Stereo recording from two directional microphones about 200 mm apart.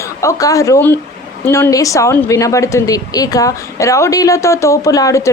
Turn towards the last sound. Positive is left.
turn(degrees=15)  # may be behind; listen again after turning